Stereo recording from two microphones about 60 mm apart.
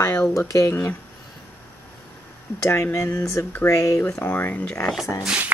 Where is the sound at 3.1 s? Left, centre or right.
Left.